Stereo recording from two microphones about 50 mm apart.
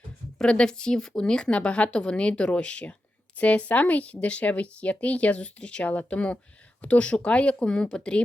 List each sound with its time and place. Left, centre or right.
0.3 s speech: centre